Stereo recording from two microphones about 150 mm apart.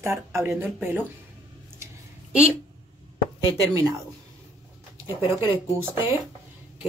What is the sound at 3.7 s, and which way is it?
Speech, 20° right (ahead or behind).